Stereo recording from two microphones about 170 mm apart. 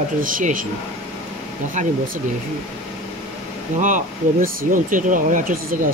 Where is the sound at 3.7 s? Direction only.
50° right (ahead or behind).